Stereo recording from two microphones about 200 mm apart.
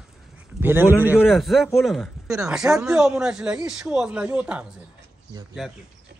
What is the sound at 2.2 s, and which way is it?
Speech, 15° right (ahead or behind).